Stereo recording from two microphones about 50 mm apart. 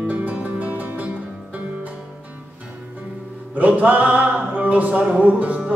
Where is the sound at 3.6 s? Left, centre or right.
Right.